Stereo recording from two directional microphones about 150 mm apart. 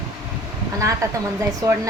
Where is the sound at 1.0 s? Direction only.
20° right (ahead or behind).